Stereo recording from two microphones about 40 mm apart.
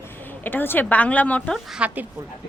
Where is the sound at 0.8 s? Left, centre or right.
Left.